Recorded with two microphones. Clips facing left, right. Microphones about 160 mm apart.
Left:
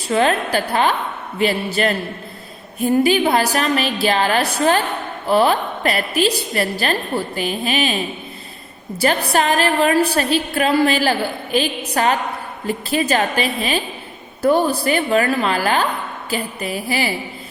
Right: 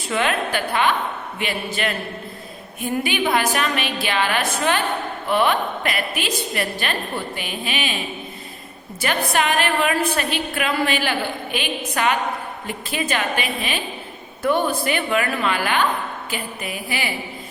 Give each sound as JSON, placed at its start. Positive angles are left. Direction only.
{"t": 0.1, "sound": "a woman's voice", "side_deg": 35}
{"t": 9.0, "sound": "a woman's voice", "side_deg": 35}